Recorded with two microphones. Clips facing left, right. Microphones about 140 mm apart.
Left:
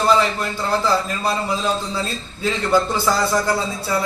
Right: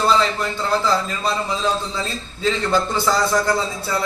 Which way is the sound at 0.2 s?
10° left (ahead or behind).